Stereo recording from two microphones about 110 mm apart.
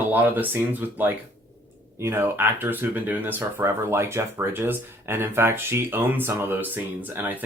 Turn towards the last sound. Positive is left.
turn(degrees=-15)  # may be behind; listen again after turning